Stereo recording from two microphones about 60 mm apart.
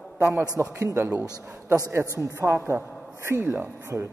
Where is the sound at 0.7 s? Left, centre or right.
Right.